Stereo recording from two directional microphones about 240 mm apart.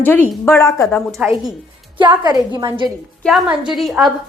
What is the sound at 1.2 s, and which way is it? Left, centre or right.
Speech, centre.